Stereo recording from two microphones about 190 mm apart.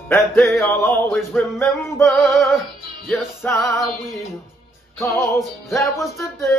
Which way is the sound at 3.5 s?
15° left (ahead or behind).